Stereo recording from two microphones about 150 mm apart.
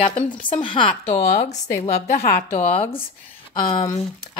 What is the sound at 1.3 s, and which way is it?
Speech, 50° left (ahead or behind).